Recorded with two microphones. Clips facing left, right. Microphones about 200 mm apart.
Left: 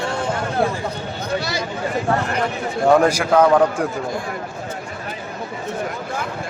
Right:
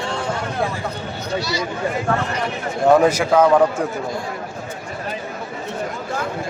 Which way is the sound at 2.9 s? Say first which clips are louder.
Right 1 dB; 5° right (ahead or behind).